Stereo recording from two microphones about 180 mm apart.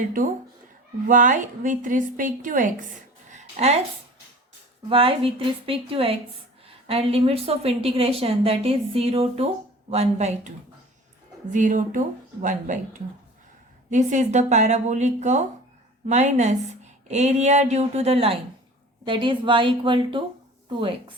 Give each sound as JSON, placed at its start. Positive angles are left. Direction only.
{"t": 1.0, "sound": "a woman's voice", "side_deg": -45}
{"t": 4.9, "sound": "speech", "side_deg": -30}
{"t": 11.5, "sound": "a woman's voice", "side_deg": -45}